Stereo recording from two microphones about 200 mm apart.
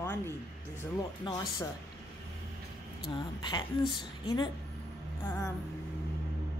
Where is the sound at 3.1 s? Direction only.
20° left (ahead or behind).